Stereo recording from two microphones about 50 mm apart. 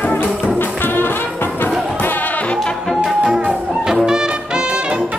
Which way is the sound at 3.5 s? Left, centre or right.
Centre.